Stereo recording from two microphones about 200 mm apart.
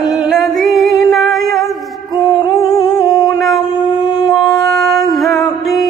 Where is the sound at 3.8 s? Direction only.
20° left (ahead or behind).